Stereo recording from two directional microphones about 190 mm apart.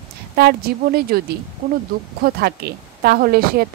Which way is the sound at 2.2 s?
55° right (ahead or behind).